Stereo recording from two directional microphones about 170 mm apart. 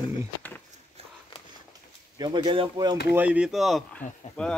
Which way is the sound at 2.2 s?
25° right (ahead or behind).